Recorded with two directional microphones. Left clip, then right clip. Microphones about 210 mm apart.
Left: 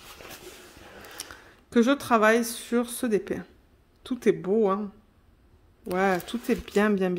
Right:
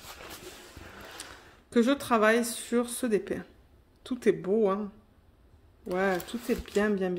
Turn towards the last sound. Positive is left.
turn(degrees=30)  # may be behind; listen again after turning